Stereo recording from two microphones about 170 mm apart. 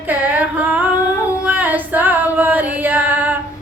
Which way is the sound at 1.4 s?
10° right (ahead or behind).